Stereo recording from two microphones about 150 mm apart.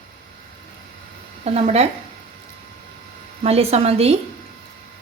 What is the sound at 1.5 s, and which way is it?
Speech, 45° right (ahead or behind).